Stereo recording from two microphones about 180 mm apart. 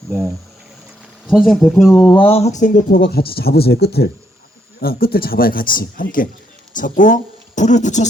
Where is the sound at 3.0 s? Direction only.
60° left (ahead or behind).